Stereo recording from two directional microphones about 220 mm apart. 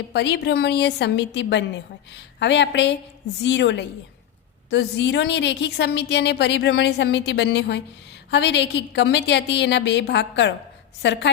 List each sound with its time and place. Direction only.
0.1 s a woman's voice: 50° left (ahead or behind)